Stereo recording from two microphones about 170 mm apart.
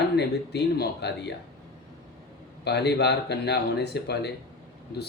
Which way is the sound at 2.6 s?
75° left (ahead or behind).